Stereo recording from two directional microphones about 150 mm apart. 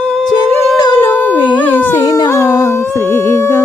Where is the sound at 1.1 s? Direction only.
10° left (ahead or behind).